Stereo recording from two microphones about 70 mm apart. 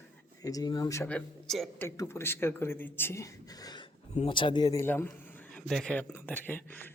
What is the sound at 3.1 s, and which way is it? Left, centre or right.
Speech, left.